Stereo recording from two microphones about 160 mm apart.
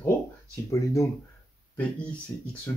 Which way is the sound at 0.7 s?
20° left (ahead or behind).